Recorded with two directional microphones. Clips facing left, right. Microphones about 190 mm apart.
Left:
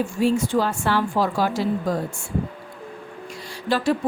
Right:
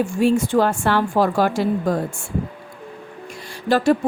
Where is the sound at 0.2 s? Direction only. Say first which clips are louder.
Right 3 dB; 50° right (ahead or behind).